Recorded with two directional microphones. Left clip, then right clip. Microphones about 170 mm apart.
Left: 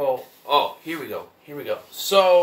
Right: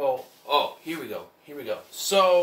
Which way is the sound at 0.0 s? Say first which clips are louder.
Left 3 dB; 15° left (ahead or behind).